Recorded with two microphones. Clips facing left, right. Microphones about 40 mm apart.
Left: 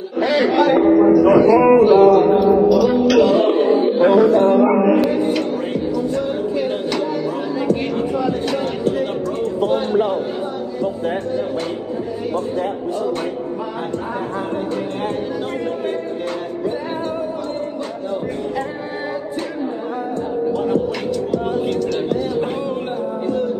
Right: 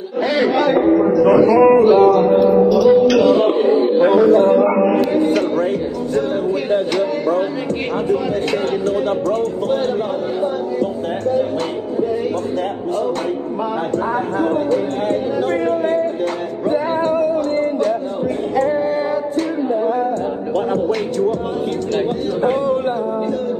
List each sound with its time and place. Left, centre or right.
0.2 s a man's voice: centre
5.1 s music: right